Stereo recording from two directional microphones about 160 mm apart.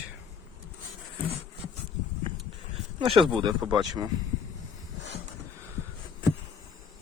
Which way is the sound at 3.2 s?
30° right (ahead or behind).